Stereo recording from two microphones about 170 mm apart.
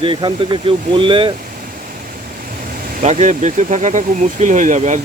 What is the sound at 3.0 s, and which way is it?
Speech, 45° right (ahead or behind).